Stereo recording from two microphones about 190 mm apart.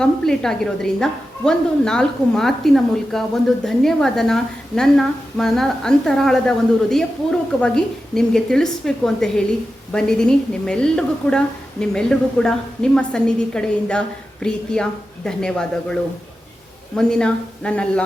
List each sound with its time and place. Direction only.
0.0 s a woman's voice: 5° left (ahead or behind)